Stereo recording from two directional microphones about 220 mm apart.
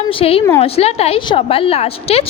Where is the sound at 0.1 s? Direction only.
25° left (ahead or behind).